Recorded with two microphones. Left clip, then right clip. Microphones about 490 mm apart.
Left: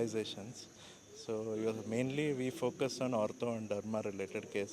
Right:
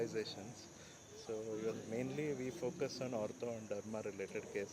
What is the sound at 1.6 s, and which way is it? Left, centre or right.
Speech, left.